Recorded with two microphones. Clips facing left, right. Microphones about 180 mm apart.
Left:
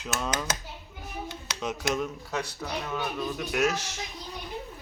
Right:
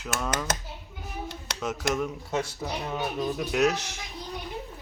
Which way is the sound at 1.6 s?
Centre (ahead or behind).